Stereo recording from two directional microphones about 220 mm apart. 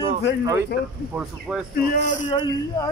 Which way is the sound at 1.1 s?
5° right (ahead or behind).